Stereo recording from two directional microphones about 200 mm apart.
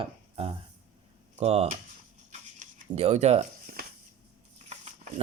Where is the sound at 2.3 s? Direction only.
35° right (ahead or behind).